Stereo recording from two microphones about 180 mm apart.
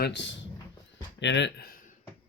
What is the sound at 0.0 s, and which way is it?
Speech, 75° left (ahead or behind).